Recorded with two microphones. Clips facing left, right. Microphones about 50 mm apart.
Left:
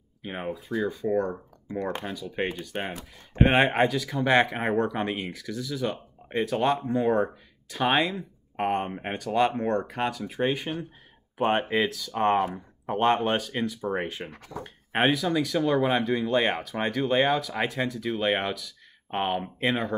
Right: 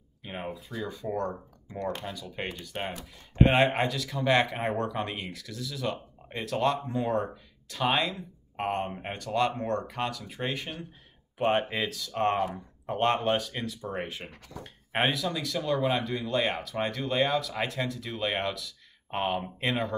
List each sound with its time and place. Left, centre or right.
0.3 s speech: left
10.3 s speech: centre
14.6 s speech: centre
15.2 s speech: left